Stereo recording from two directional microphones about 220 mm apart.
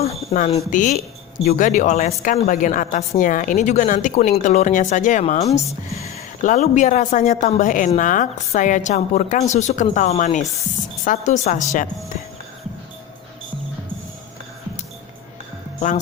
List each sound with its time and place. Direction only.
0.0 s a woman's voice: 30° left (ahead or behind)